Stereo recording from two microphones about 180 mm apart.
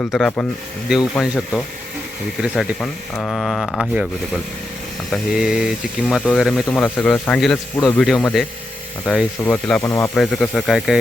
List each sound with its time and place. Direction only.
0.1 s speech: 5° left (ahead or behind)
5.1 s speech: 5° right (ahead or behind)
9.8 s speech: 15° left (ahead or behind)
10.2 s speech: 5° left (ahead or behind)